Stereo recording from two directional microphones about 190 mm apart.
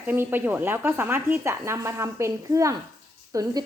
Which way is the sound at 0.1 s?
10° right (ahead or behind).